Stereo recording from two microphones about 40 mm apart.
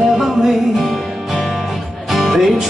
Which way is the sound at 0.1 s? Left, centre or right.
Centre.